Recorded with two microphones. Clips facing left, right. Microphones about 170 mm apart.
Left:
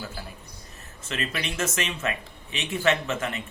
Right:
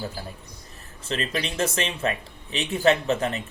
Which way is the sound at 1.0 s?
35° right (ahead or behind).